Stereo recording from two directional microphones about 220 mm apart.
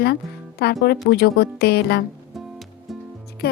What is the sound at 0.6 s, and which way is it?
A woman's voice, 45° left (ahead or behind).